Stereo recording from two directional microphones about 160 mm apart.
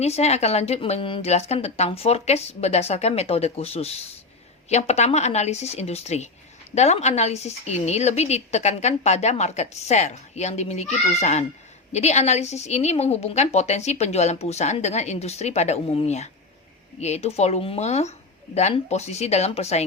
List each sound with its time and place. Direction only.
0.0 s a woman's voice: 40° left (ahead or behind)